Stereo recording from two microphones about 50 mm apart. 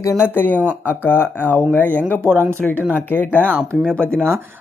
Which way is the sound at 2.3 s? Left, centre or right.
Right.